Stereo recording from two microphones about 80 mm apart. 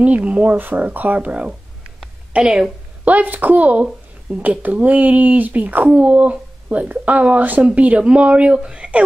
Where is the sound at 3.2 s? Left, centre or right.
Right.